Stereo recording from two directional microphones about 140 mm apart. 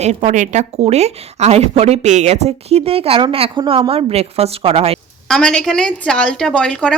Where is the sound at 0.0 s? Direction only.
55° right (ahead or behind).